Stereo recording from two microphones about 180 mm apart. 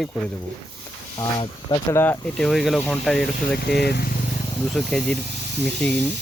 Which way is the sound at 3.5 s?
65° left (ahead or behind).